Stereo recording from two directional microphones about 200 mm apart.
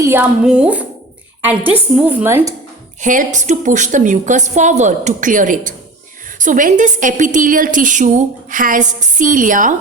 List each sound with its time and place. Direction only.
0.0 s a woman's voice: 10° right (ahead or behind)
3.0 s a woman's voice: 40° right (ahead or behind)